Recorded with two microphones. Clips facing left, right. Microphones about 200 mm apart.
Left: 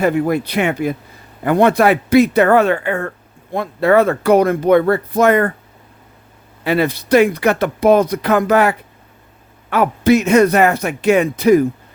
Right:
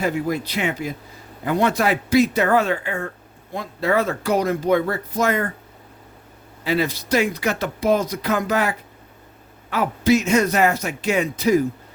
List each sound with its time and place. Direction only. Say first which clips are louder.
0.0 s speech: left 7 dB; 60° left (ahead or behind)
6.7 s speech: left 6 dB; 60° left (ahead or behind)